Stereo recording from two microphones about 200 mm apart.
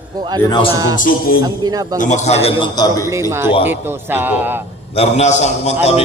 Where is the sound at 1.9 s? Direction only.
40° left (ahead or behind).